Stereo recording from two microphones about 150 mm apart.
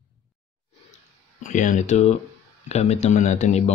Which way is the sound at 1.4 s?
55° left (ahead or behind).